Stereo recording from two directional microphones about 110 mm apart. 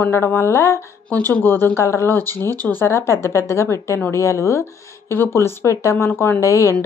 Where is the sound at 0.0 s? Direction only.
20° left (ahead or behind).